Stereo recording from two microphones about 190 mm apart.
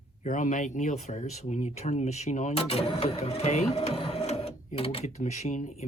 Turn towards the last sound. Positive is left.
turn(degrees=40)  # may be behind; listen again after turning